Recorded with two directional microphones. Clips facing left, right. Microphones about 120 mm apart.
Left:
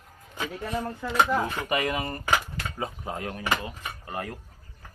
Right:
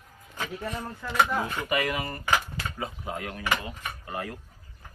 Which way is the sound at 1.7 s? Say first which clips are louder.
Left 1 dB; 25° left (ahead or behind).